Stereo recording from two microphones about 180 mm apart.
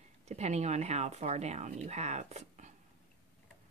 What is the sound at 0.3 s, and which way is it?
Speech, 40° right (ahead or behind).